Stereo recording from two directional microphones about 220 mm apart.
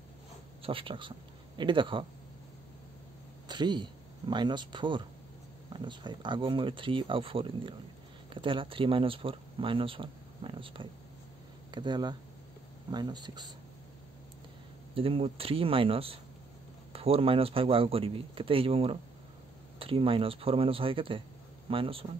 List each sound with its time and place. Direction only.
0.6 s speech: 25° right (ahead or behind)
3.4 s speech: 20° right (ahead or behind)
15.0 s speech: 25° right (ahead or behind)